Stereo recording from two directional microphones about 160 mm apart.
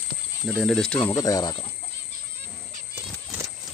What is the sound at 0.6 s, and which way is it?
Speech, 5° left (ahead or behind).